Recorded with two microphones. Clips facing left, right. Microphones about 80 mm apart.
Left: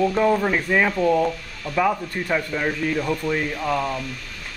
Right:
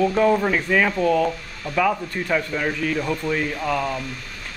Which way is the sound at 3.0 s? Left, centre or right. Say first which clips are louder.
Even; centre.